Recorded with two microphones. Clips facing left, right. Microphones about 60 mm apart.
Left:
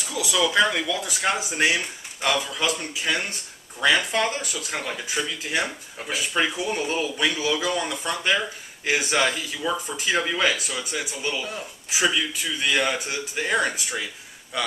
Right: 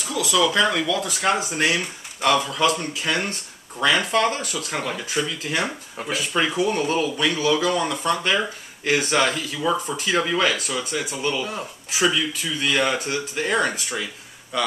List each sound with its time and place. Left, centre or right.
0.1 s speech: centre